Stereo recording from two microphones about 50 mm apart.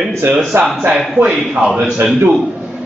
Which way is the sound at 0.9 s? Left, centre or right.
Centre.